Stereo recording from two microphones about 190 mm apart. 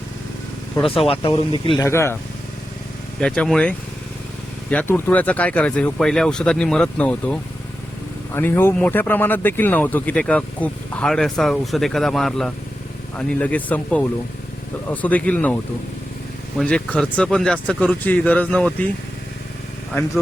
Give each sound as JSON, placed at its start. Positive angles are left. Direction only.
{"t": 0.9, "sound": "speech", "side_deg": 30}
{"t": 1.8, "sound": "speech", "side_deg": 15}
{"t": 3.2, "sound": "speech", "side_deg": 5}
{"t": 16.6, "sound": "speech", "side_deg": 5}